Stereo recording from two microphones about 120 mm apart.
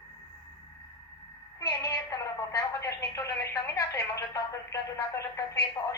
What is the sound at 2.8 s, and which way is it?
Telephone, 25° left (ahead or behind).